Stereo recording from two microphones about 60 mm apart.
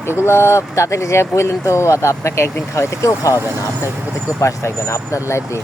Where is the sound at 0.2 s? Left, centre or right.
Left.